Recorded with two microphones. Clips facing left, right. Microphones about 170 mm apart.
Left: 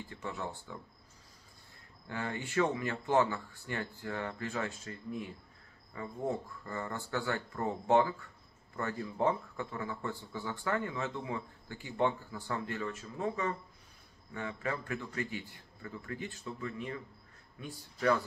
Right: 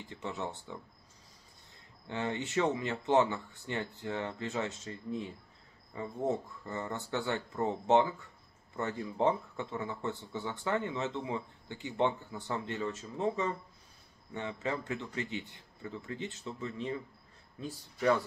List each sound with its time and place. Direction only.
0.1 s speech: 20° right (ahead or behind)
2.0 s speech: 20° right (ahead or behind)